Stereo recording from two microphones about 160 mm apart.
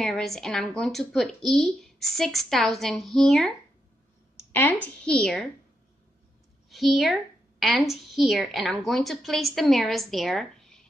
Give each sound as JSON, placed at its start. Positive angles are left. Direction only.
{"t": 0.0, "sound": "speech", "side_deg": 0}
{"t": 4.4, "sound": "a sound", "side_deg": 15}
{"t": 4.8, "sound": "speech", "side_deg": 5}
{"t": 6.7, "sound": "a woman's voice", "side_deg": 0}